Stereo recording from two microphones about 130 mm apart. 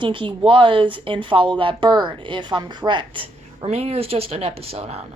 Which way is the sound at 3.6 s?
50° right (ahead or behind).